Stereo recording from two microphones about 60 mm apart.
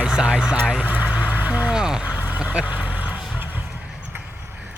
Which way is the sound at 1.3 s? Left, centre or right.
Right.